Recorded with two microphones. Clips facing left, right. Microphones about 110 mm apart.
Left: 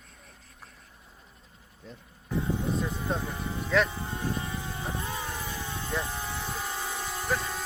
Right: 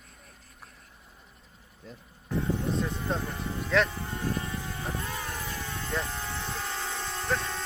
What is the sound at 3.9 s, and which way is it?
Vehicle, 20° left (ahead or behind).